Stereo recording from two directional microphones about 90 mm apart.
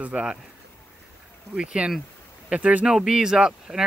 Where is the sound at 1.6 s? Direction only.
10° right (ahead or behind).